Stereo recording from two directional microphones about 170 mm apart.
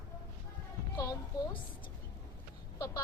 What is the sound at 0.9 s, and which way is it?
Speech, 20° left (ahead or behind).